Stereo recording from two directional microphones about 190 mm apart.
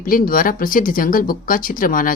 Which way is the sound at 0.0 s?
50° left (ahead or behind).